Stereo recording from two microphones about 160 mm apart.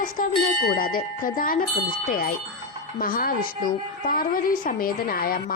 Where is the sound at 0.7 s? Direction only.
65° left (ahead or behind).